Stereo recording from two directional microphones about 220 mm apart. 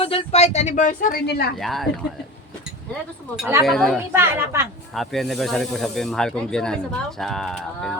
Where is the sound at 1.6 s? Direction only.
Centre (ahead or behind).